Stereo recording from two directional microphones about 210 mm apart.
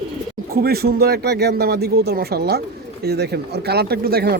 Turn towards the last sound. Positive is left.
turn(degrees=-45)  # may be behind; listen again after turning